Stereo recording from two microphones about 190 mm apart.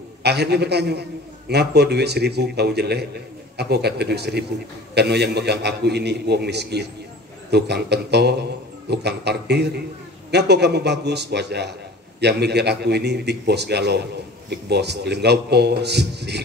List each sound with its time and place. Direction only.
0.2 s a man's voice: 60° right (ahead or behind)